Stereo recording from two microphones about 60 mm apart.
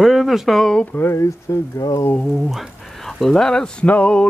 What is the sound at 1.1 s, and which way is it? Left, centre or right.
Speech, left.